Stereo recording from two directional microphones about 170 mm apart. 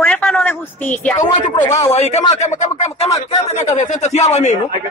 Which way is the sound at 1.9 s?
40° left (ahead or behind).